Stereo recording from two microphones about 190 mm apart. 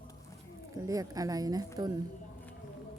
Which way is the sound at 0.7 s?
20° right (ahead or behind).